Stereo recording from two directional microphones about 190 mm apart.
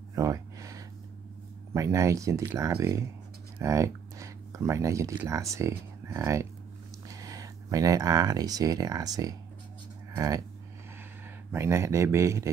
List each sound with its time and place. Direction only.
0.1 s a sound: 15° right (ahead or behind)
1.7 s speech: 15° right (ahead or behind)
11.5 s speech: 15° right (ahead or behind)